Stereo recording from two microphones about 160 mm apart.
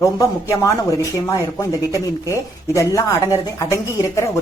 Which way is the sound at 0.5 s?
20° left (ahead or behind).